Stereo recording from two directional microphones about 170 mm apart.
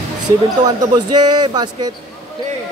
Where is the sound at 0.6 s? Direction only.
25° right (ahead or behind).